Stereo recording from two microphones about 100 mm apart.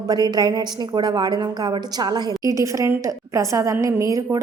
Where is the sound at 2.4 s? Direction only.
35° right (ahead or behind).